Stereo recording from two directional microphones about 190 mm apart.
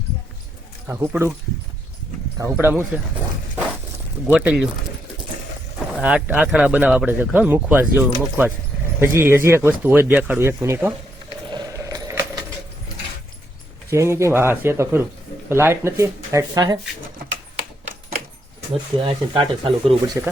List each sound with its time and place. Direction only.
0.9 s speech: 10° right (ahead or behind)
2.4 s speech: 10° right (ahead or behind)
4.3 s speech: 5° right (ahead or behind)
5.9 s speech: 5° right (ahead or behind)
11.5 s keys jangling: 20° right (ahead or behind)
13.9 s speech: 15° right (ahead or behind)
18.7 s speech: 25° right (ahead or behind)
20.2 s speech: 10° right (ahead or behind)